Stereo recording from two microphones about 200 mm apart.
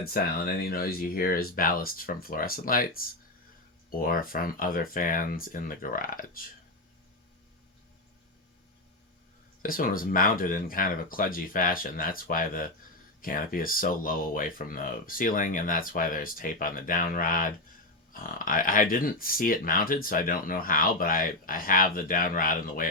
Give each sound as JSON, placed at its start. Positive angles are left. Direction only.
{"t": 0.0, "sound": "speech", "side_deg": 50}
{"t": 9.6, "sound": "speech", "side_deg": 45}